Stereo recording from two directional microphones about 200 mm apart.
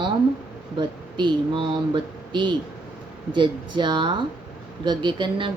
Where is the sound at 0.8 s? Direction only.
25° right (ahead or behind).